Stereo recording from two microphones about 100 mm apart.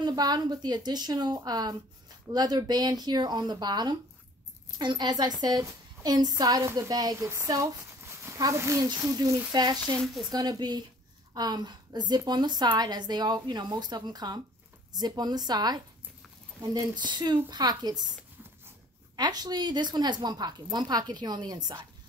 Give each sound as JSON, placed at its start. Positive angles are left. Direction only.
{"t": 0.0, "sound": "a woman's voice", "side_deg": -40}
{"t": 9.9, "sound": "speech", "side_deg": 0}
{"t": 10.3, "sound": "a woman's voice", "side_deg": -40}
{"t": 19.1, "sound": "a woman's voice", "side_deg": -40}